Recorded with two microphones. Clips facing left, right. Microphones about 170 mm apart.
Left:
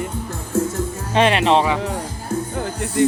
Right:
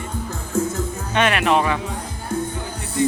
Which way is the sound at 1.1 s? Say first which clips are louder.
Left 3 dB; 30° left (ahead or behind).